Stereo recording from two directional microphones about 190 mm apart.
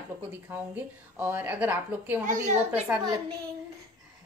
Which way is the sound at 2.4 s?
35° right (ahead or behind).